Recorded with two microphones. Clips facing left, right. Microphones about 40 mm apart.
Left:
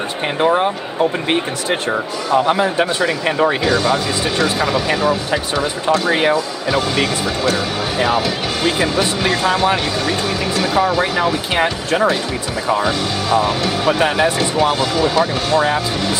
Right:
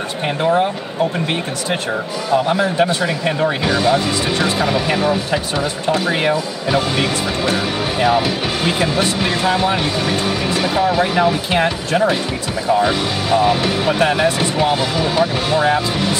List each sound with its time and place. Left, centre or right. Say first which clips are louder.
0.4 s speech: left 1 dB; centre
1.7 s speech: left 2 dB; centre
3.6 s speech: even; centre
6.0 s speech: left 2 dB; centre
6.3 s speech: even; centre
11.5 s speech: even; centre
12.8 s speech: right 1 dB; centre
13.9 s speech: right 2 dB; centre
14.4 s speech: left 1 dB; centre